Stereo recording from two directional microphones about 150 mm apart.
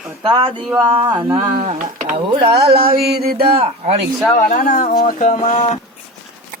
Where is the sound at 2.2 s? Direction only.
35° right (ahead or behind).